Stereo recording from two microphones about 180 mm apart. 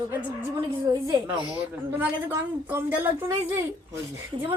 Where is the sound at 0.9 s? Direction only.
25° right (ahead or behind).